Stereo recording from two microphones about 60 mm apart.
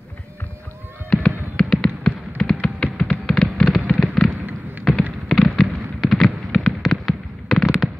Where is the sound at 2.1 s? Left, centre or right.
Centre.